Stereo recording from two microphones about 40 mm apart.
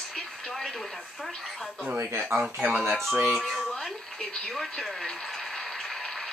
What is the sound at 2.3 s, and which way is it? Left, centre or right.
Speech, right.